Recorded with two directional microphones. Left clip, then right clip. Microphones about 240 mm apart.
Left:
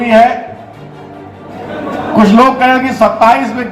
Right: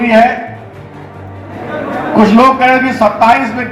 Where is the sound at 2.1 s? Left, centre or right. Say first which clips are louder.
Even; left.